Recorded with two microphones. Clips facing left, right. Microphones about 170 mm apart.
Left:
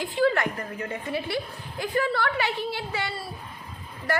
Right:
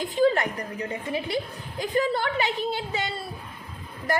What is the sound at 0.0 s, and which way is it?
A woman's voice, 20° right (ahead or behind).